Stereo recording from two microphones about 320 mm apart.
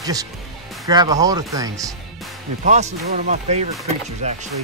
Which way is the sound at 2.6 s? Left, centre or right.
Right.